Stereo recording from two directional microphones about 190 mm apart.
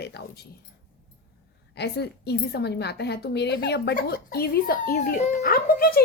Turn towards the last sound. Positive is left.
turn(degrees=50)  # may be behind; listen again after turning